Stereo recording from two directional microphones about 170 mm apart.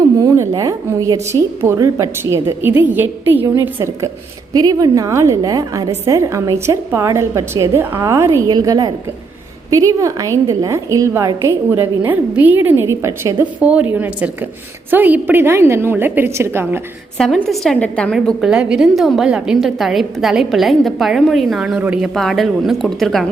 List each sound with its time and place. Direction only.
0.2 s a woman's voice: 20° right (ahead or behind)
17.2 s a woman's voice: 5° left (ahead or behind)